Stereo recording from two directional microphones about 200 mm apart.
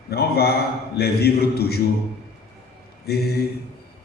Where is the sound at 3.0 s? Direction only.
55° left (ahead or behind).